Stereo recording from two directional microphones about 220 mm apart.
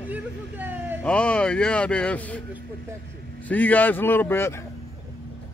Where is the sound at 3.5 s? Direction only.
5° left (ahead or behind).